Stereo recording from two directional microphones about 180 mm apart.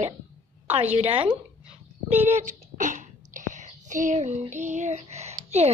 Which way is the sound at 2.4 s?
45° right (ahead or behind).